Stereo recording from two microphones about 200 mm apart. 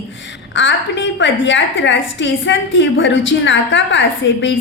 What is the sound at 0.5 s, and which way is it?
A woman's voice, 65° left (ahead or behind).